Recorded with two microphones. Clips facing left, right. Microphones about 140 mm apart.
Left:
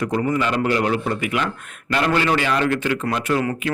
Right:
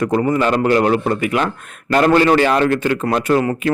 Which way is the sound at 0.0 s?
45° right (ahead or behind).